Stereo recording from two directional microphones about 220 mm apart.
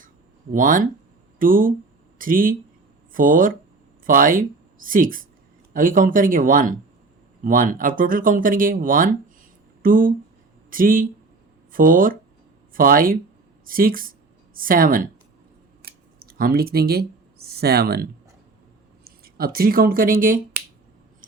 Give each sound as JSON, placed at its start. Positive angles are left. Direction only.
{"t": 0.5, "sound": "speech", "side_deg": -40}
{"t": 15.8, "sound": "a sound", "side_deg": -40}
{"t": 17.5, "sound": "speech", "side_deg": -45}